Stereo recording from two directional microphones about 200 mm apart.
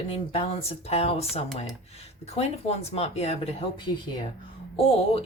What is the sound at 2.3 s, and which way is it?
Speech, 30° left (ahead or behind).